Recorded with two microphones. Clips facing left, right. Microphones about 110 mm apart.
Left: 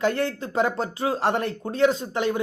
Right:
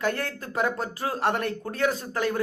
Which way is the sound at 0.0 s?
30° left (ahead or behind).